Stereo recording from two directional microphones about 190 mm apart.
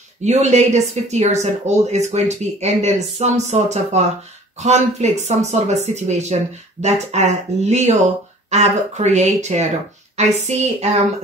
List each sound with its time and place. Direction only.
0.2 s speech: 35° right (ahead or behind)